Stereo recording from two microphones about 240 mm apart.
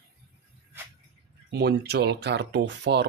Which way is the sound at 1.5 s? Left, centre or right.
Right.